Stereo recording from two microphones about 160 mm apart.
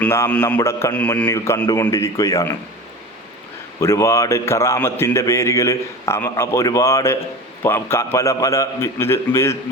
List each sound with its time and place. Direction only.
0.0 s a man's voice: 10° left (ahead or behind)
3.8 s a man's voice: 20° left (ahead or behind)